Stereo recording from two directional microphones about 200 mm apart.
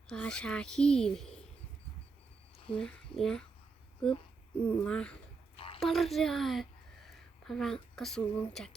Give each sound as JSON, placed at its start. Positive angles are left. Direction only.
{"t": 0.1, "sound": "speech", "side_deg": 5}
{"t": 2.7, "sound": "speech", "side_deg": 5}
{"t": 4.6, "sound": "speech", "side_deg": 10}
{"t": 5.5, "sound": "a sound", "side_deg": 25}
{"t": 5.8, "sound": "speech", "side_deg": 0}